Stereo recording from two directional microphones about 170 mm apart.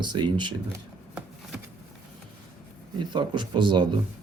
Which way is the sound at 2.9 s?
25° right (ahead or behind).